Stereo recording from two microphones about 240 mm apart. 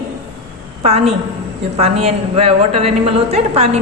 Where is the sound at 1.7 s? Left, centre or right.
Right.